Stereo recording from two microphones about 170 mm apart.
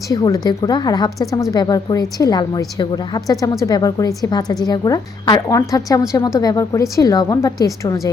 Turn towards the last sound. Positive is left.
turn(degrees=20)  # may be behind; listen again after turning